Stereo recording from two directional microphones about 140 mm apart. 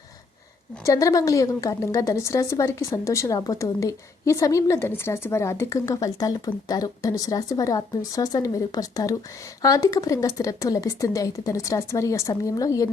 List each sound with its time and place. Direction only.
0.9 s speech: 25° left (ahead or behind)